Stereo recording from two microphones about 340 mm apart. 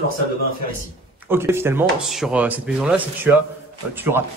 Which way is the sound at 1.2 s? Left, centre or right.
Centre.